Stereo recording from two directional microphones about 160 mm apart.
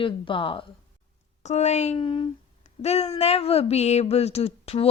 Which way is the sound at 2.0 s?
30° left (ahead or behind).